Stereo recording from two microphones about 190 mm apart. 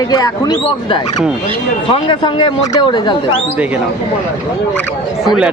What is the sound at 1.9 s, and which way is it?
Speech, 25° left (ahead or behind).